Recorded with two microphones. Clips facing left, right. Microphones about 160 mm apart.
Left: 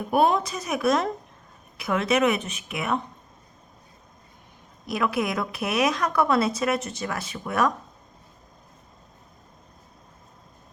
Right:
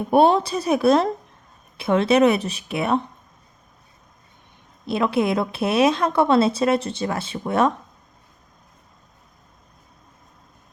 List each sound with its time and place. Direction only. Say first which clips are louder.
0.1 s speech: right 5 dB; 30° right (ahead or behind)
4.9 s a woman's voice: right 5 dB; 30° right (ahead or behind)